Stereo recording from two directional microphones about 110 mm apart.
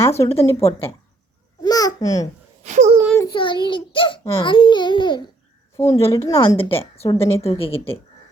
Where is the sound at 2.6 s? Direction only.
90° right.